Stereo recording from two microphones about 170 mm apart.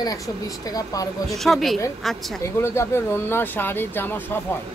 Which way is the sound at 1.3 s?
Centre (ahead or behind).